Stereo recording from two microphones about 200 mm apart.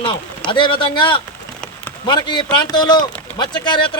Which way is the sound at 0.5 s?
25° left (ahead or behind).